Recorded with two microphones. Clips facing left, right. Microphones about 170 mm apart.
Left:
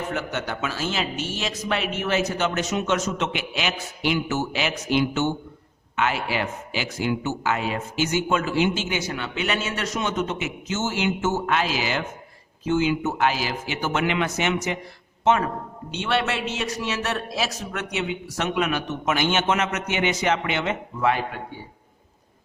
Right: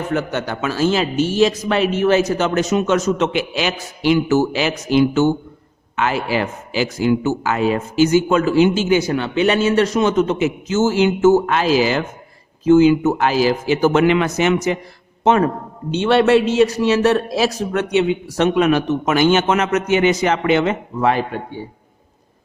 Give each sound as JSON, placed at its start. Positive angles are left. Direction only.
{"t": 0.1, "sound": "a man's voice", "side_deg": -35}